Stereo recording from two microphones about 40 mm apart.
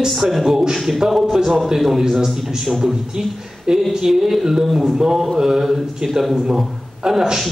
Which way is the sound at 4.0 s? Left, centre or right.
Centre.